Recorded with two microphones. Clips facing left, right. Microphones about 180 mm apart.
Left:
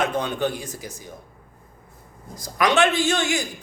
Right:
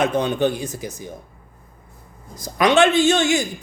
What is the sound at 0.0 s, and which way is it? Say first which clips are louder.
Speech: right 5 dB; 20° right (ahead or behind).